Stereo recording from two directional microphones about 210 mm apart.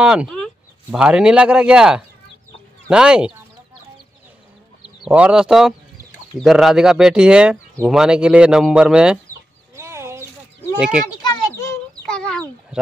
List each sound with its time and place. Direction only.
0.0 s speech: 5° right (ahead or behind)
5.0 s speech: 5° right (ahead or behind)
9.8 s a sound: 15° right (ahead or behind)
10.8 s speech: 5° right (ahead or behind)
11.1 s children playing: 15° left (ahead or behind)
12.1 s chicken: 5° left (ahead or behind)